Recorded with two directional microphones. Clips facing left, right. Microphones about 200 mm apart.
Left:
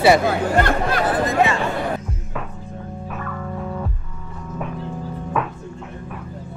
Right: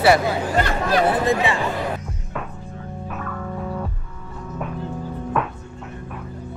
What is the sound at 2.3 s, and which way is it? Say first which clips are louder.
Music: even; centre (ahead or behind).